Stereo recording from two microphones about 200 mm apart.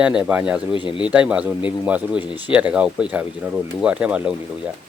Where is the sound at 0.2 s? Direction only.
5° right (ahead or behind).